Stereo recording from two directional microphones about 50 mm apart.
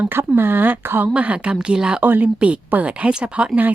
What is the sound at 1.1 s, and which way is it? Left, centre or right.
Speech, right.